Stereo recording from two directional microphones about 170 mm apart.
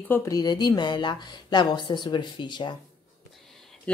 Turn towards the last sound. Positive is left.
turn(degrees=5)  # may be behind; listen again after turning